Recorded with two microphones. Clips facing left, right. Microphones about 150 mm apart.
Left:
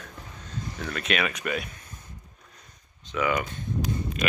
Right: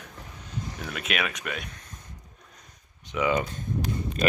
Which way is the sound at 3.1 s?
20° right (ahead or behind).